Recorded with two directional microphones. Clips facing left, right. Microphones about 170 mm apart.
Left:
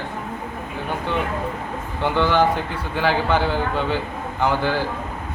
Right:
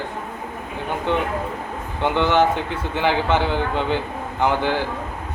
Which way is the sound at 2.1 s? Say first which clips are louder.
Even; 20° right (ahead or behind).